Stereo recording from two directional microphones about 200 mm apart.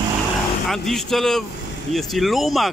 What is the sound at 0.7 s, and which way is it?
Speech, centre (ahead or behind).